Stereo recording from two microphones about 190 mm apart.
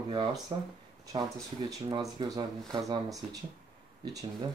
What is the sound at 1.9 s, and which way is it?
Speech, 25° right (ahead or behind).